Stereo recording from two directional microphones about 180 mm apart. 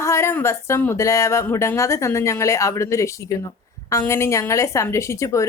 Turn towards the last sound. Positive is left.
turn(degrees=15)  # may be behind; listen again after turning